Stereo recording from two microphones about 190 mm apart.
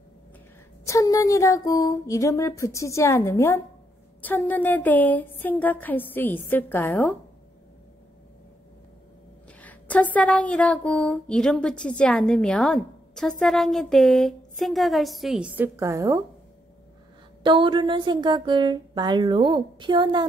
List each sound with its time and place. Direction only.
0.8 s a woman's voice: 15° left (ahead or behind)
9.6 s a sound: 10° left (ahead or behind); by 16.2 s 15° right (ahead or behind)
17.4 s speech: 25° right (ahead or behind)